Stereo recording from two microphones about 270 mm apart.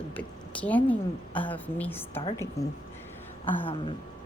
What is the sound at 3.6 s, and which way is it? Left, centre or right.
Speech, centre.